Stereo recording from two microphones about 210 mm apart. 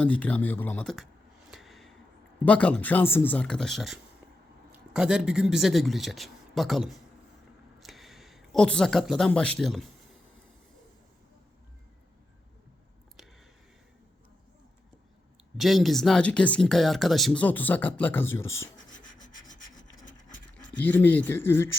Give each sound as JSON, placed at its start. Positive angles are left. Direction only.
{"t": 0.0, "sound": "speech", "side_deg": 5}
{"t": 1.5, "sound": "a sound", "side_deg": 0}
{"t": 2.4, "sound": "a man's voice", "side_deg": 5}
{"t": 15.5, "sound": "speech", "side_deg": 0}
{"t": 18.9, "sound": "a sound", "side_deg": 40}
{"t": 20.7, "sound": "speech", "side_deg": 10}